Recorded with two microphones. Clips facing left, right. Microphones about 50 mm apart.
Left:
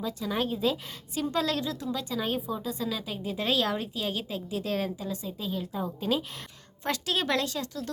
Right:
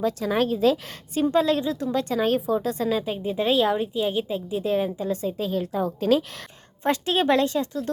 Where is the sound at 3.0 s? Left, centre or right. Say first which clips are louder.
Right 7 dB; right.